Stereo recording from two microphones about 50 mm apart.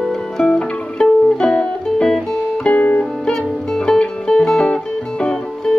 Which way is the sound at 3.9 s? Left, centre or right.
Centre.